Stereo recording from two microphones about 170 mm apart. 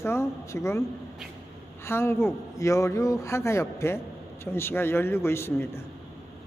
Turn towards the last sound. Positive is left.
turn(degrees=15)  # may be behind; listen again after turning